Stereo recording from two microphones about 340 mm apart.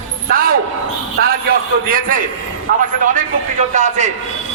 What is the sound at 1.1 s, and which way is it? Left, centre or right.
A man's voice, right.